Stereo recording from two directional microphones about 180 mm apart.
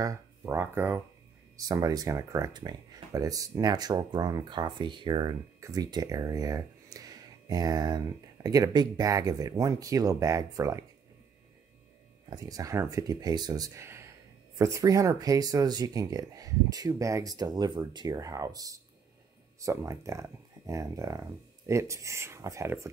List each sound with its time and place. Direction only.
0.0 s speech: 15° right (ahead or behind)
12.3 s speech: 20° right (ahead or behind)